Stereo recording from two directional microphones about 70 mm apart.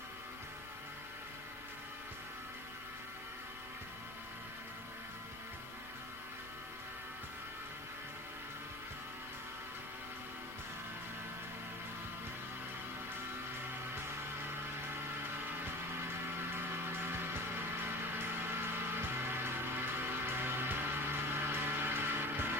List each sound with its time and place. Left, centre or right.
16.5 s music: right